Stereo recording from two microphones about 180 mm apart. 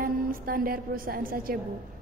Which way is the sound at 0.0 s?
50° right (ahead or behind).